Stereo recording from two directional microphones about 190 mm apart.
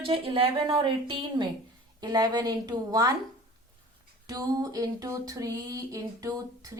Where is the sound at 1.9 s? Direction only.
20° right (ahead or behind).